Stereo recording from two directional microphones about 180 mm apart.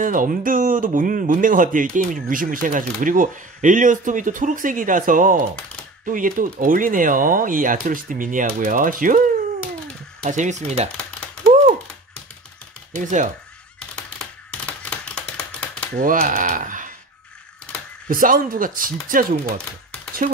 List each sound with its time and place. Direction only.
0.0 s speech: 50° right (ahead or behind)
12.9 s speech: 45° right (ahead or behind)
14.7 s a sound: 5° left (ahead or behind)
16.0 s speech: 50° right (ahead or behind)
18.0 s speech: 50° right (ahead or behind)